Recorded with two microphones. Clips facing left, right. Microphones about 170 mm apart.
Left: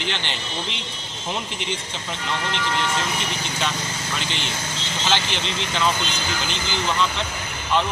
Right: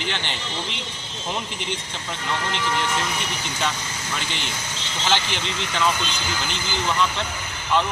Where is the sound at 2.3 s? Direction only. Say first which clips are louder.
Even; 10° right (ahead or behind).